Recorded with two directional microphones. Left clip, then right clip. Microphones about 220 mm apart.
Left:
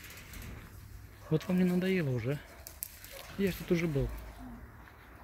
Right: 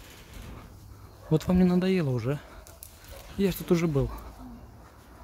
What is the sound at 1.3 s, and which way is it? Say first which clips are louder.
Speech: right 6 dB; 20° right (ahead or behind).